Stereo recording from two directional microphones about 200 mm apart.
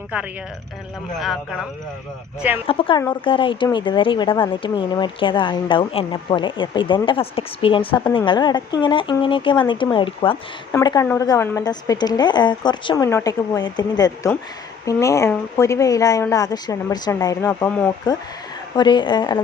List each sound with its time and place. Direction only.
1.2 s speech: centre (ahead or behind)
2.6 s a woman's voice: 25° left (ahead or behind)